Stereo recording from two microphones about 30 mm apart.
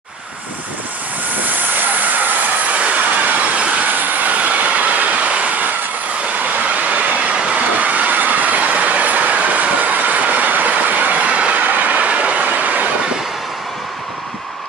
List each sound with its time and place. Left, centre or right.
1.5 s vehicle: right
2.7 s train: right
6.7 s vehicle: right
7.5 s train: right
11.6 s train: right